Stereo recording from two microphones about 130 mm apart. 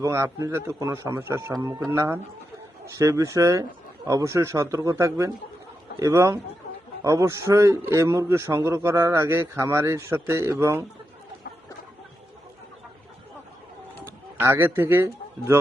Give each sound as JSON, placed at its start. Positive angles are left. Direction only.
{"t": 0.0, "sound": "a man's voice", "side_deg": -25}
{"t": 14.0, "sound": "speech", "side_deg": -15}